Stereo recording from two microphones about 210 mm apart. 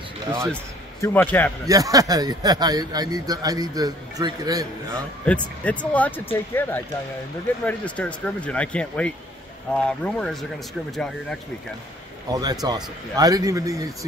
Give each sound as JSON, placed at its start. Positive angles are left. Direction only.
{"t": 1.0, "sound": "speech", "side_deg": 10}
{"t": 1.7, "sound": "a man's voice", "side_deg": -15}
{"t": 5.2, "sound": "speech", "side_deg": 5}
{"t": 12.3, "sound": "a man's voice", "side_deg": -20}